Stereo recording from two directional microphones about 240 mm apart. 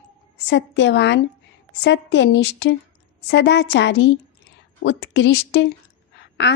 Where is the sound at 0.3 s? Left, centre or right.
Left.